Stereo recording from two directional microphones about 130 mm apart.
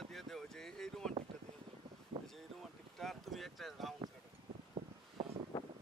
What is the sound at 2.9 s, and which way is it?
Boat, centre (ahead or behind).